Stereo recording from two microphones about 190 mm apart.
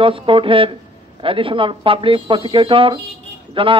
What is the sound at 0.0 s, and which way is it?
A man's voice, 25° right (ahead or behind).